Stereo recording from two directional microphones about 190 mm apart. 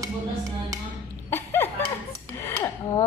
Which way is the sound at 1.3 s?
10° left (ahead or behind).